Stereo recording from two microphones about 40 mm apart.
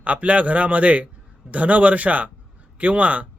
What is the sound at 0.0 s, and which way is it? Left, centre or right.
Speech, right.